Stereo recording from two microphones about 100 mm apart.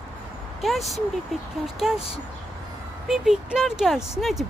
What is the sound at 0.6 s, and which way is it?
Speech, centre (ahead or behind).